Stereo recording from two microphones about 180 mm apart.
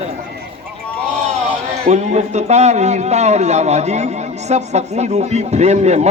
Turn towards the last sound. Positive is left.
turn(degrees=-40)  # may be behind; listen again after turning